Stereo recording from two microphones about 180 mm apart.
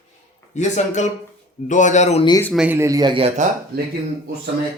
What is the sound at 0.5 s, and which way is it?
Speech, 40° left (ahead or behind).